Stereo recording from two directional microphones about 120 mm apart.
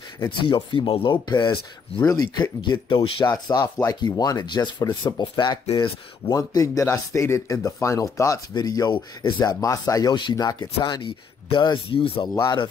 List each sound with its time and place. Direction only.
0.4 s speech: 45° left (ahead or behind)
3.5 s speech: 30° left (ahead or behind); by 12.3 s 45° left (ahead or behind)